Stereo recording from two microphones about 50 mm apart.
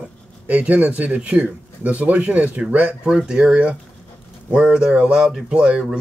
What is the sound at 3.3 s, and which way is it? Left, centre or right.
Speech, centre.